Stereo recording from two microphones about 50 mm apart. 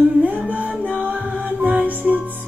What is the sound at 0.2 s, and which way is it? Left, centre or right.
Music, right.